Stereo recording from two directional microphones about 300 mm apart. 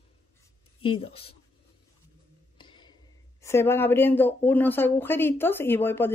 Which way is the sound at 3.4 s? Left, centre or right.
Centre.